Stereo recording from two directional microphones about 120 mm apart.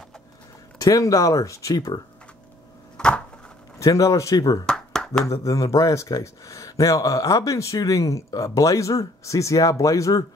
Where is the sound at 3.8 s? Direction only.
25° left (ahead or behind).